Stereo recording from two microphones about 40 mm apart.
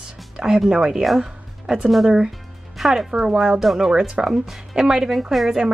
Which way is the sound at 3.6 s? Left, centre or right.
Centre.